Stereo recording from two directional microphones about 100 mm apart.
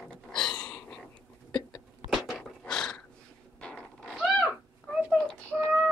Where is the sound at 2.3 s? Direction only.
10° left (ahead or behind).